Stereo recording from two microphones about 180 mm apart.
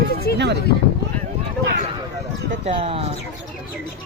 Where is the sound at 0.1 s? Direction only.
60° left (ahead or behind).